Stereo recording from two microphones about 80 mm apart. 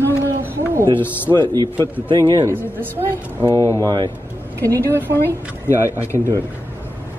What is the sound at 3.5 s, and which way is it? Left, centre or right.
Speech, left.